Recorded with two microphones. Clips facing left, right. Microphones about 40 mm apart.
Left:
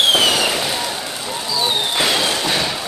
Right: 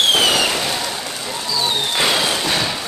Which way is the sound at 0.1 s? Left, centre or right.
Centre.